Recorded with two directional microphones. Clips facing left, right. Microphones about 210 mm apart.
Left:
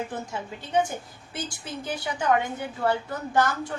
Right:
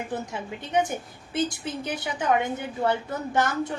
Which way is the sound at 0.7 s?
20° right (ahead or behind).